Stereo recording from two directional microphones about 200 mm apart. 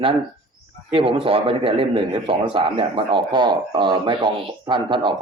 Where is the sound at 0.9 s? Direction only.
25° right (ahead or behind).